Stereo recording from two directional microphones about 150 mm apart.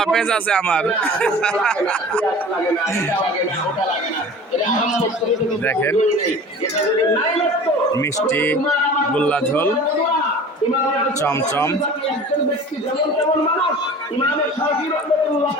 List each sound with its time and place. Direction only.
0.0 s speech: 5° left (ahead or behind)
5.6 s speech: 15° left (ahead or behind)
7.9 s speech: 15° left (ahead or behind)
11.2 s a man's voice: 15° left (ahead or behind)